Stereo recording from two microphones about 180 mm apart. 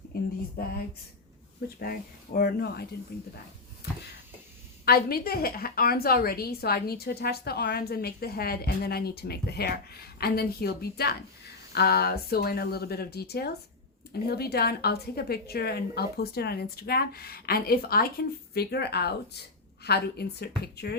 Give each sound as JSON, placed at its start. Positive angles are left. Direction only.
{"t": 1.8, "sound": "a woman's voice", "side_deg": 55}
{"t": 3.8, "sound": "a sound", "side_deg": 60}
{"t": 4.9, "sound": "a woman's voice", "side_deg": 60}